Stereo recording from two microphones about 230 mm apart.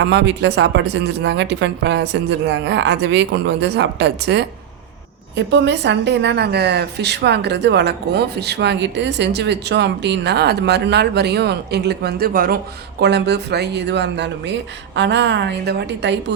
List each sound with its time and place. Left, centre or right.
0.0 s a woman's voice: right